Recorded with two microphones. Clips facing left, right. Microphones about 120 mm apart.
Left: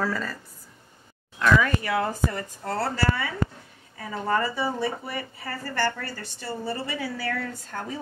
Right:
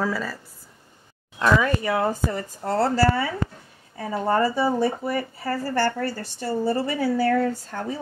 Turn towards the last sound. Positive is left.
turn(degrees=-35)  # may be behind; listen again after turning